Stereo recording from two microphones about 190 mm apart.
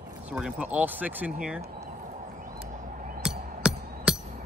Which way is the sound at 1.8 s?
40° right (ahead or behind).